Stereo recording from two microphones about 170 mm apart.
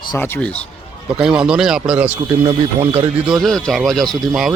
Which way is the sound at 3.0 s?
25° right (ahead or behind).